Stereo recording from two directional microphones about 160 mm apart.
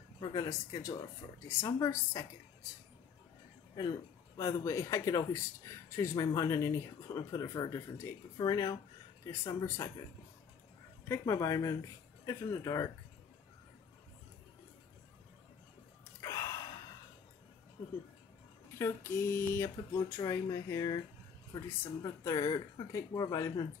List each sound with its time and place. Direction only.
0.2 s speech: 25° left (ahead or behind)
4.4 s speech: 20° left (ahead or behind)
11.1 s speech: 15° left (ahead or behind)
16.2 s gasp: 20° left (ahead or behind)
18.8 s speech: 15° left (ahead or behind)